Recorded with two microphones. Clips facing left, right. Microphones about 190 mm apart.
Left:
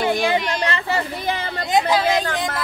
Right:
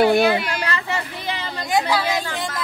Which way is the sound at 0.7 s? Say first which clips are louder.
Left 3 dB; 30° left (ahead or behind).